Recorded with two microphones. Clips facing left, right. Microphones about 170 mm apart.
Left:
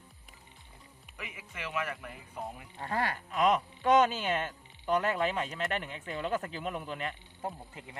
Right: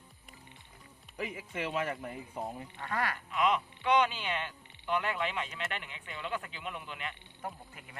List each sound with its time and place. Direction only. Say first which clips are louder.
1.1 s speech: right 8 dB; 35° right (ahead or behind)
2.7 s speech: left 3 dB; 30° left (ahead or behind)
3.3 s speech: left 3 dB; 45° left (ahead or behind)
7.4 s speech: left 3 dB; 25° left (ahead or behind)